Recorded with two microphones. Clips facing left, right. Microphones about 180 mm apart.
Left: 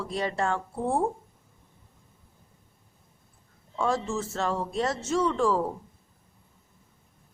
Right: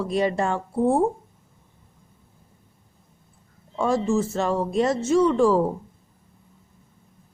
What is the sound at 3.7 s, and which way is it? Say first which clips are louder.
A woman's voice: right 6 dB; 15° right (ahead or behind).